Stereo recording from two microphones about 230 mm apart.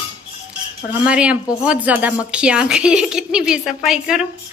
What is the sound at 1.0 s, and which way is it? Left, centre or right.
Speech, centre.